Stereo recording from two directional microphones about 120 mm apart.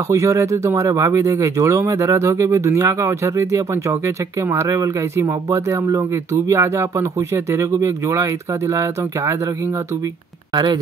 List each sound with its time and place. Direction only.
0.1 s speech: 25° right (ahead or behind)
10.5 s speech: 35° right (ahead or behind)